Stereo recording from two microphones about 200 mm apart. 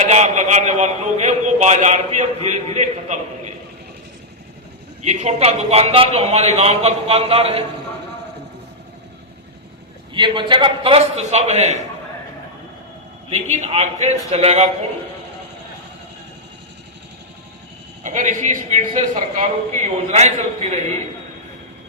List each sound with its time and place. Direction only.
0.0 s a man's voice: 35° right (ahead or behind)
5.0 s a man's voice: 30° right (ahead or behind)
10.2 s a man's voice: 25° right (ahead or behind)
13.3 s a man's voice: 35° right (ahead or behind)
18.0 s a man's voice: 40° right (ahead or behind)